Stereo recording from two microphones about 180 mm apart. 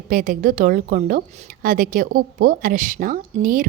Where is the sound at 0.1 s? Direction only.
50° right (ahead or behind).